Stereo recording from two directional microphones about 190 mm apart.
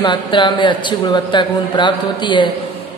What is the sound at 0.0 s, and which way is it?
A man's voice, 25° left (ahead or behind).